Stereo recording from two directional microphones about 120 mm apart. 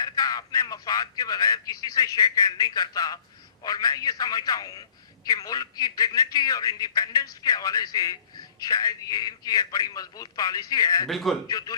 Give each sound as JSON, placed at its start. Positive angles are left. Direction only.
{"t": 0.0, "sound": "a man's voice", "side_deg": 30}
{"t": 11.1, "sound": "a man's voice", "side_deg": 0}
{"t": 11.4, "sound": "a man's voice", "side_deg": 30}